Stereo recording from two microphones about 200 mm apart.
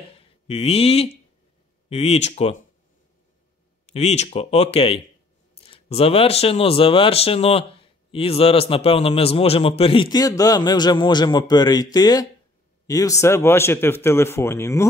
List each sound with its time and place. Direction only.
0.1 s speech: 30° left (ahead or behind)
3.8 s speech: 35° left (ahead or behind); by 14.9 s 15° left (ahead or behind)